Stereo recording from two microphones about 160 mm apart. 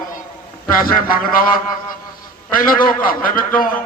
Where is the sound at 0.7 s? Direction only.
60° left (ahead or behind).